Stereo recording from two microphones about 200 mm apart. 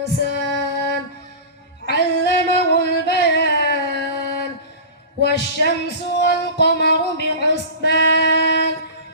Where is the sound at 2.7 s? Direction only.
55° left (ahead or behind).